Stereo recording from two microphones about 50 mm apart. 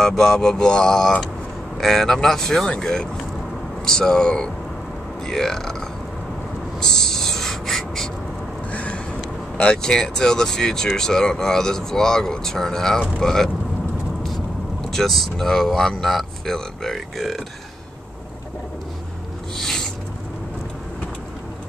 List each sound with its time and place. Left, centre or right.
0.0 s speech: centre
6.8 s a sound: centre
8.7 s a sound: left
9.6 s speech: centre
14.8 s speech: centre
19.5 s owl: centre